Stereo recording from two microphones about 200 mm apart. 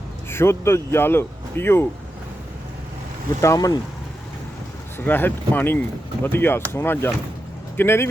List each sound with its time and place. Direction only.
0.3 s speech: 10° left (ahead or behind)
3.4 s speech: 15° left (ahead or behind)
4.9 s speech: 10° left (ahead or behind)